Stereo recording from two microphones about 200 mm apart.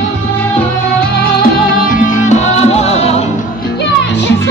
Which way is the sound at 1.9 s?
40° left (ahead or behind).